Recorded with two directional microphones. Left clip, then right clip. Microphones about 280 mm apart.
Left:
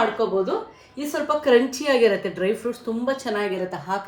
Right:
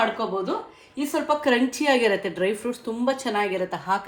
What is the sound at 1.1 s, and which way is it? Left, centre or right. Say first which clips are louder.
A woman's voice: left 4 dB; right.